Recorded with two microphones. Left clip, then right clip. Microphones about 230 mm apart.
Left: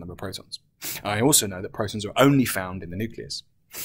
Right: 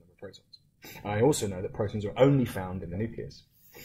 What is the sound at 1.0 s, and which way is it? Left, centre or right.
Speech, centre.